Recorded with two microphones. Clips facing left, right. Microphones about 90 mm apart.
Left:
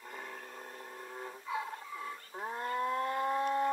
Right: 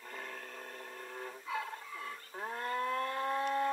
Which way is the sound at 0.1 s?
10° left (ahead or behind).